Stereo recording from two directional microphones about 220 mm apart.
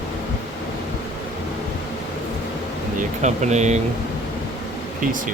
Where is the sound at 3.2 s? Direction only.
30° right (ahead or behind).